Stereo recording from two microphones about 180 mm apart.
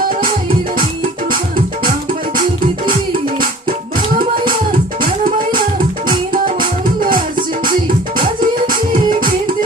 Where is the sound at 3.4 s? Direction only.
50° right (ahead or behind).